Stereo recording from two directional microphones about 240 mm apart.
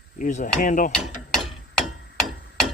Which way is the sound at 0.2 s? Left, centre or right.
Left.